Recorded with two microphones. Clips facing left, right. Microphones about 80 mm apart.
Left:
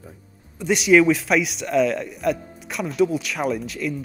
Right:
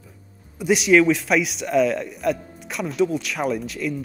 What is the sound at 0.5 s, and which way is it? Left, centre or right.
A man's voice, centre.